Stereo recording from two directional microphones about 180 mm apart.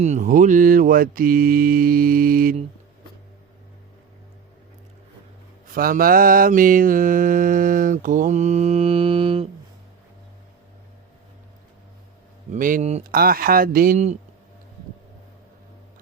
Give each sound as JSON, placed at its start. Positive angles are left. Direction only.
{"t": 0.0, "sound": "mantra", "side_deg": -45}
{"t": 5.6, "sound": "mantra", "side_deg": -55}
{"t": 12.5, "sound": "mantra", "side_deg": -50}
{"t": 13.1, "sound": "mantra", "side_deg": -55}